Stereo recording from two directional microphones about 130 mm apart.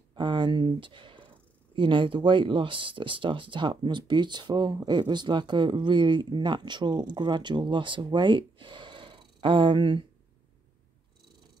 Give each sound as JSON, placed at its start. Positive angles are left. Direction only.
{"t": 0.1, "sound": "speech", "side_deg": -35}